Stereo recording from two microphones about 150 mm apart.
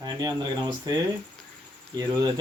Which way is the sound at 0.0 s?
25° right (ahead or behind).